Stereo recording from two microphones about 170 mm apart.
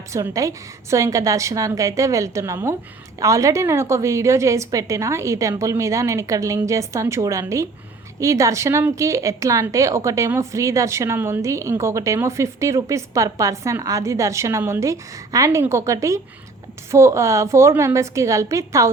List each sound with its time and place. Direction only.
0.1 s a woman's voice: 20° right (ahead or behind)